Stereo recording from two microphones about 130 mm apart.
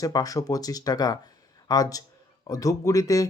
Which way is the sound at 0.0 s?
25° left (ahead or behind).